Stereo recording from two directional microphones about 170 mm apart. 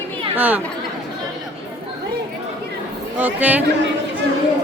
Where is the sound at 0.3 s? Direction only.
10° right (ahead or behind).